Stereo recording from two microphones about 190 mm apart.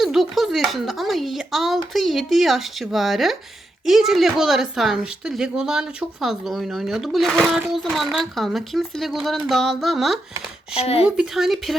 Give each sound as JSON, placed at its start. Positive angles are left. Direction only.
{"t": 0.0, "sound": "speech", "side_deg": 0}
{"t": 10.8, "sound": "speech", "side_deg": 30}
{"t": 11.0, "sound": "speech", "side_deg": -5}